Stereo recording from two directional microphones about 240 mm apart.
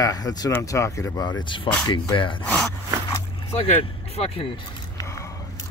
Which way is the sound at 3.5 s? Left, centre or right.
Left.